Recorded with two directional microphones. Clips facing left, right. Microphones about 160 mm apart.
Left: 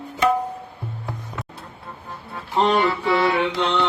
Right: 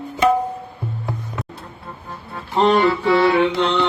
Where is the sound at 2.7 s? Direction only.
10° left (ahead or behind).